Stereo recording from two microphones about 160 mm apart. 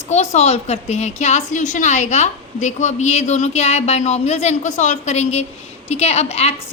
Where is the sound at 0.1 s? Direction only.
45° left (ahead or behind).